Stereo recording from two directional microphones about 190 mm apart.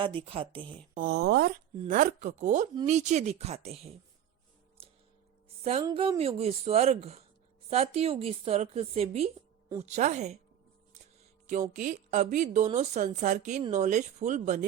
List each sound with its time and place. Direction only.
0.0 s speech: 25° right (ahead or behind)
0.9 s speech: 55° right (ahead or behind)
1.9 s a woman's voice: 45° right (ahead or behind)
4.8 s a sound: 30° right (ahead or behind)
5.9 s a woman's voice: 30° right (ahead or behind)
11.7 s a woman's voice: 40° right (ahead or behind)